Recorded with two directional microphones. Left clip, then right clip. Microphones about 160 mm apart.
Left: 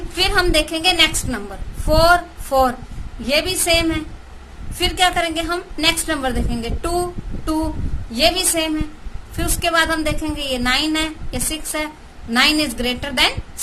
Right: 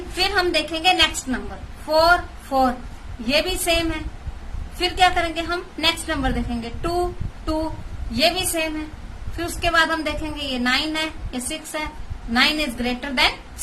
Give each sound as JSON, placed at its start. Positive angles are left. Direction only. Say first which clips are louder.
{"t": 0.2, "sound": "a woman's voice", "louder": "left 3 dB", "side_deg": 30}
{"t": 8.1, "sound": "a woman's voice", "louder": "left 3 dB", "side_deg": 30}